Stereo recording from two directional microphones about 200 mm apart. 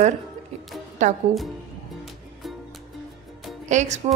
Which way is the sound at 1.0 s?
35° right (ahead or behind).